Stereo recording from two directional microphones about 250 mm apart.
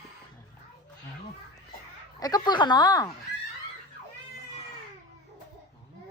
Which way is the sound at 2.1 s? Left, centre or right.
Centre.